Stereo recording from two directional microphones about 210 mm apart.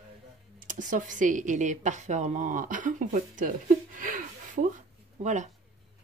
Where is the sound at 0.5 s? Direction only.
35° right (ahead or behind).